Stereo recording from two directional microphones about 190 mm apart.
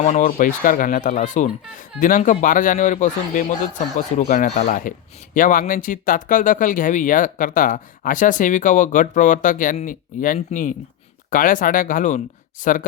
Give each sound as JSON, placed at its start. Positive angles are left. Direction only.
{"t": 0.0, "sound": "speech", "side_deg": 40}